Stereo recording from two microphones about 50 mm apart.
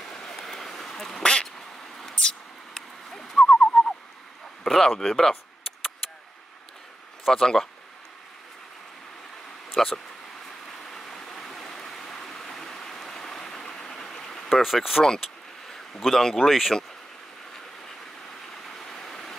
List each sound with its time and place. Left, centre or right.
0.0 s duck: centre
1.2 s quack: centre
2.1 s owl: centre
4.6 s speech: centre
7.2 s speech: centre
9.8 s speech: centre
10.9 s vehicle: centre
14.5 s speech: centre
16.0 s speech: centre
18.7 s vehicle: centre